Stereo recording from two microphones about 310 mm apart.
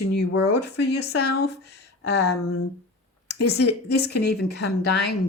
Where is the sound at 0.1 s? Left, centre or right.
Left.